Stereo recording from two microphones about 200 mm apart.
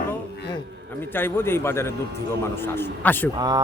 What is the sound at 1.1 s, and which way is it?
Speech, 10° left (ahead or behind).